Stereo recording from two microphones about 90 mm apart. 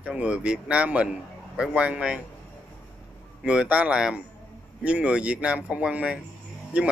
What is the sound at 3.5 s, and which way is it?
Speech, 10° right (ahead or behind).